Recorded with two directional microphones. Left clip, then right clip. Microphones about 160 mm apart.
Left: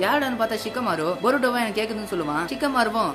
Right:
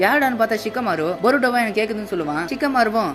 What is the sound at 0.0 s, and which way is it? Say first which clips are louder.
Speech: right 5 dB; 30° right (ahead or behind).